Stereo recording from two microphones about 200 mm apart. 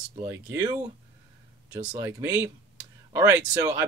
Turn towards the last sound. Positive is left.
turn(degrees=-15)  # may be behind; listen again after turning